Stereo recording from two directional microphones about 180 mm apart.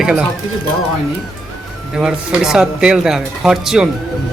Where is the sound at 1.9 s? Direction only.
5° right (ahead or behind).